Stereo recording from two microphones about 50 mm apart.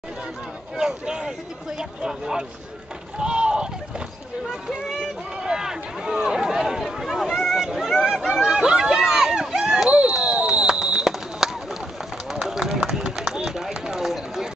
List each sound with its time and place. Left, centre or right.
0.7 s speech: centre
3.2 s rowboat: centre
4.5 s speech: centre
5.4 s run: centre
8.3 s a sound: centre
12.3 s run: centre